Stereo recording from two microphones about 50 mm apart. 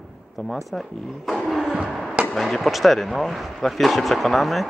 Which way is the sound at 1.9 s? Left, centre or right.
Centre.